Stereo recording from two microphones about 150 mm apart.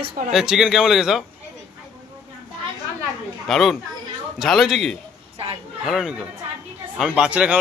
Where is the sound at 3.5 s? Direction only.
Centre (ahead or behind).